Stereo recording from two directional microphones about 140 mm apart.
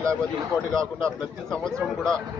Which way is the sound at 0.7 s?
5° left (ahead or behind).